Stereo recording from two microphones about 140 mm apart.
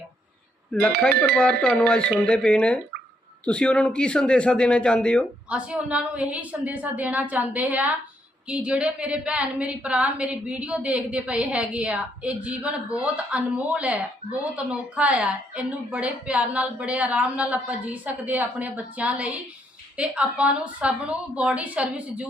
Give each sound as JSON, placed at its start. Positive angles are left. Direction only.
{"t": 0.7, "sound": "a man's voice", "side_deg": 5}
{"t": 5.5, "sound": "a woman's voice", "side_deg": -10}